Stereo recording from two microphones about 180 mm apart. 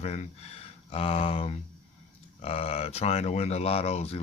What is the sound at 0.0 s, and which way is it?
Speech, 40° left (ahead or behind).